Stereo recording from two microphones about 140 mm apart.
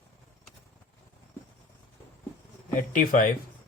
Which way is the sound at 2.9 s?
70° left (ahead or behind).